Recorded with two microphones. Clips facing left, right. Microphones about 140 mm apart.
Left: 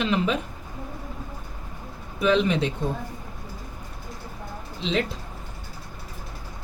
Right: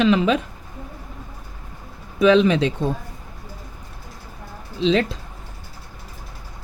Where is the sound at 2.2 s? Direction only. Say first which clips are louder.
Right 6 dB; 90° right.